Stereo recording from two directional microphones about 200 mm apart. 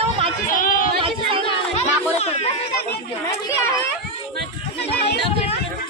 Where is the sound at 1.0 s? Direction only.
25° right (ahead or behind).